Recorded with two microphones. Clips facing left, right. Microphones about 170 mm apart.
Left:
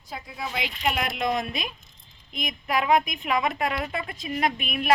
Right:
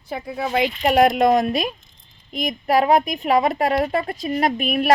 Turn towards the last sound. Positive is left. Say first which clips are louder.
# right 6 dB
turn(degrees=-40)  # may be behind; listen again after turning